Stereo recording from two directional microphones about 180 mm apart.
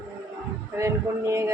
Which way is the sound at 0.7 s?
15° right (ahead or behind).